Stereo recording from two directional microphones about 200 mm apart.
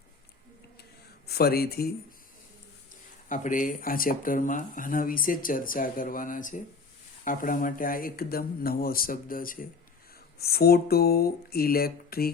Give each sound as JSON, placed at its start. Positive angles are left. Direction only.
{"t": 1.3, "sound": "speech", "side_deg": 50}
{"t": 3.2, "sound": "speech", "side_deg": 40}